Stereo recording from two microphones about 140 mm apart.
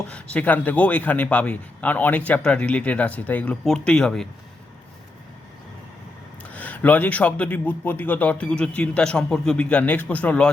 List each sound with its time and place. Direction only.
0.1 s a man's voice: 10° left (ahead or behind)
6.4 s a man's voice: 10° left (ahead or behind)